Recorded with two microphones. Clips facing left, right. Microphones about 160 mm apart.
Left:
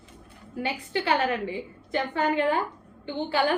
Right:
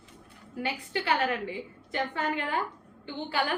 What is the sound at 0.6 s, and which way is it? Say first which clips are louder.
A woman's voice: left 3 dB; 25° left (ahead or behind).